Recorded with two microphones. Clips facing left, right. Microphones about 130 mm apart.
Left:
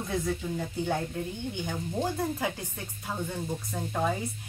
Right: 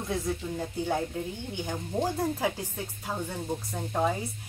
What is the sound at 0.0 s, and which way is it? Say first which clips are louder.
Speech: even; 10° right (ahead or behind).